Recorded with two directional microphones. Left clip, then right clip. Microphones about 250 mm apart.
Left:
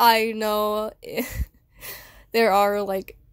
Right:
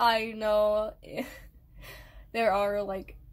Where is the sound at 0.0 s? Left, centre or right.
Left.